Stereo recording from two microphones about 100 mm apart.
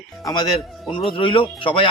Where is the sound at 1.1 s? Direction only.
60° left (ahead or behind).